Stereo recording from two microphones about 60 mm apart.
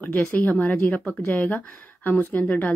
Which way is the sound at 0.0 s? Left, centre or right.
Left.